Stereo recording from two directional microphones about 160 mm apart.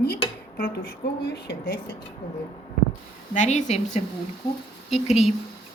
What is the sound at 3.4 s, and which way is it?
Speech, 45° left (ahead or behind).